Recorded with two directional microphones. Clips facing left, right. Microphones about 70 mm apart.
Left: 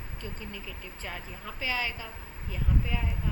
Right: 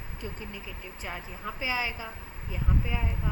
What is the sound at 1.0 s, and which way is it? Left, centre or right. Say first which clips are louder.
A woman's voice: right 3 dB; centre.